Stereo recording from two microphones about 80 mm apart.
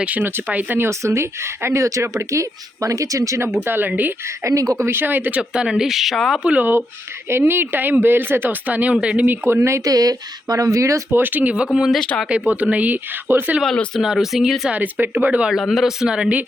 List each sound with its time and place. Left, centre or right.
0.0 s speech: centre
0.9 s speech: right
4.7 s speech: right
5.4 s speech: centre
6.4 s speech: centre
9.2 s speech: right
9.8 s speech: right
11.1 s speech: right
11.7 s speech: centre
12.3 s speech: centre
14.0 s speech: centre
14.7 s speech: centre
15.4 s speech: centre